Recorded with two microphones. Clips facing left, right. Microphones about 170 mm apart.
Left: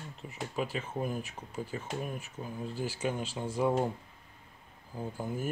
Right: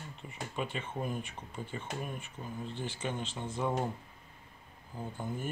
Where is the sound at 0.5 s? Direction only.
5° left (ahead or behind).